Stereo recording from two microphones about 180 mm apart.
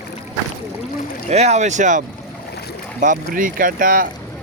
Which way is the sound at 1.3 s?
35° right (ahead or behind).